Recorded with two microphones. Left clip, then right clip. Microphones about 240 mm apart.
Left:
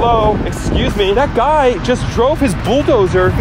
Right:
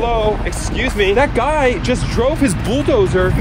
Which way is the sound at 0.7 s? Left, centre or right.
Centre.